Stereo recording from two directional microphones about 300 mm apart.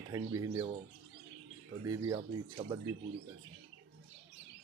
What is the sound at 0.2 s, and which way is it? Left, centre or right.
Speech, centre.